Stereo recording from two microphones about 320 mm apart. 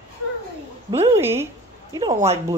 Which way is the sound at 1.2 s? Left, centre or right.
Centre.